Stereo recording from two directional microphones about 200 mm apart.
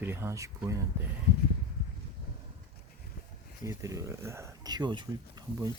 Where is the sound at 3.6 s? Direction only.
15° right (ahead or behind).